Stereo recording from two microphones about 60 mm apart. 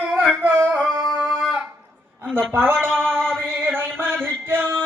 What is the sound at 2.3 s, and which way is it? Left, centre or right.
Speech, right.